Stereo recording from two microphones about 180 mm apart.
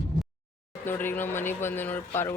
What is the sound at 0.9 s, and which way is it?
Speech, 10° left (ahead or behind).